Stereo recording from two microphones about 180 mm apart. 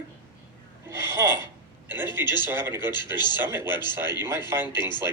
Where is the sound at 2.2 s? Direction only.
25° left (ahead or behind).